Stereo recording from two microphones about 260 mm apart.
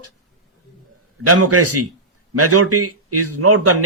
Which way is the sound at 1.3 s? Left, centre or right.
Right.